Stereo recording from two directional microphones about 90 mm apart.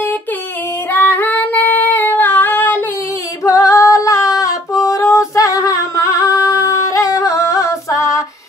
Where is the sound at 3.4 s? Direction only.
40° left (ahead or behind).